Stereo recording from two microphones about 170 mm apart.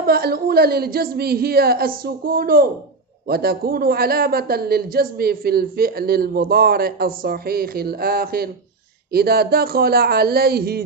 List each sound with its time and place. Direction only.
0.0 s a man's voice: 65° right (ahead or behind)